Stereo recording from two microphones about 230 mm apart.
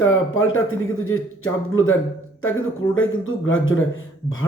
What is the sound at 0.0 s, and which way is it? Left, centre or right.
A man's voice, left.